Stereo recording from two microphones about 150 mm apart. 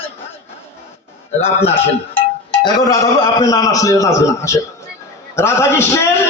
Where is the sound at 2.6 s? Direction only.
25° left (ahead or behind).